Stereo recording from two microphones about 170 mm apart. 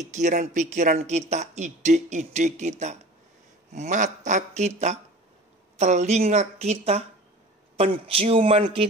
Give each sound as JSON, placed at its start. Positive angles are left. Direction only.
{"t": 0.1, "sound": "a man's voice", "side_deg": -45}